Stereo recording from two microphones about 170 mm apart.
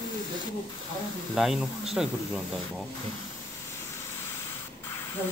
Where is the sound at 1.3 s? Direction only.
Centre (ahead or behind).